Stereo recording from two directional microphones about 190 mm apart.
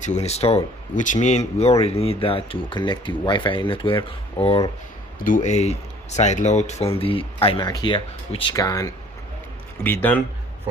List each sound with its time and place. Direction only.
0.0 s speech: 35° left (ahead or behind)
5.2 s speech: 45° left (ahead or behind); by 10.2 s 10° left (ahead or behind)